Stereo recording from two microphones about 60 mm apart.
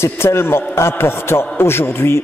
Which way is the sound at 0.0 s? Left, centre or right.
Left.